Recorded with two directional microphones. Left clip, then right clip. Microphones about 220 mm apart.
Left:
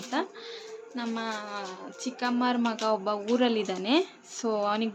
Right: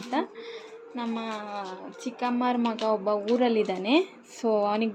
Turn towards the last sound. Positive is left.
turn(degrees=-10)  # may be behind; listen again after turning